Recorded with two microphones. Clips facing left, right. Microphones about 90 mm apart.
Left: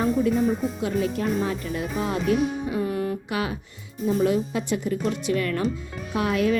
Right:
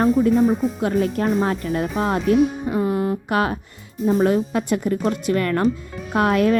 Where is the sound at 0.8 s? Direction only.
50° right (ahead or behind).